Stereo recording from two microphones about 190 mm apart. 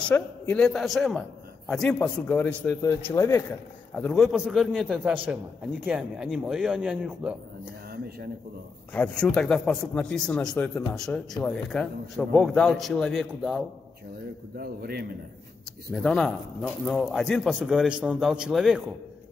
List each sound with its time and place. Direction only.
0.0 s a man's voice: 5° left (ahead or behind)
8.9 s speech: 5° left (ahead or behind)
14.6 s a man's voice: 55° right (ahead or behind)
15.9 s speech: centre (ahead or behind)